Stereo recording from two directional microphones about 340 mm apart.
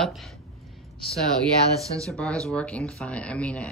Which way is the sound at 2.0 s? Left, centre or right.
Centre.